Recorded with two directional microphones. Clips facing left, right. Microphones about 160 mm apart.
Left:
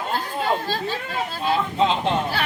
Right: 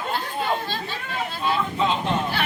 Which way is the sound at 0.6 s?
40° left (ahead or behind).